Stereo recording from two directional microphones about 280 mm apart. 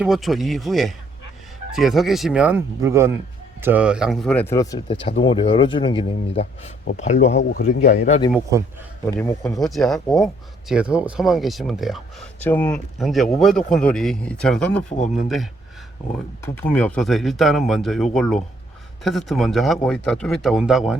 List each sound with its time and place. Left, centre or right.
0.0 s speech: centre; by 7.3 s left
7.3 s speech: left
8.3 s a man's voice: centre
9.0 s speech: centre
14.8 s speech: left
15.1 s speech: centre